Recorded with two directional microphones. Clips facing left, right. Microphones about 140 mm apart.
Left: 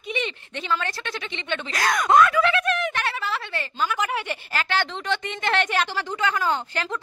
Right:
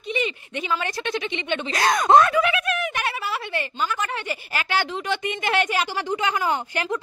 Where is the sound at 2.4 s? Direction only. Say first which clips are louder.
Left 1 dB; 10° right (ahead or behind).